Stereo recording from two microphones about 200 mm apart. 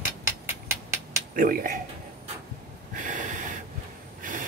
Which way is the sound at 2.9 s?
40° right (ahead or behind).